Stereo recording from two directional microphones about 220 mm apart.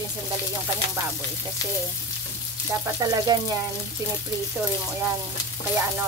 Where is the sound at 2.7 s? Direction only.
15° right (ahead or behind).